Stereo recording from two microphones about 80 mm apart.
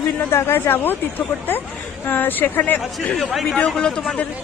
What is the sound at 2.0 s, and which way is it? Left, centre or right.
A man's voice, left.